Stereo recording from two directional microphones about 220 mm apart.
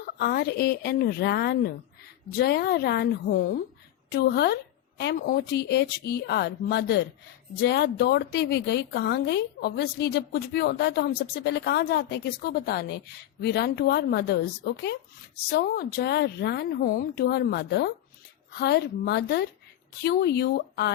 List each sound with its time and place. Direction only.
0.0 s a woman's voice: 45° left (ahead or behind)